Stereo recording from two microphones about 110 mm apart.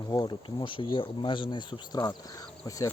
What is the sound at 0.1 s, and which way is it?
Speech, 40° left (ahead or behind).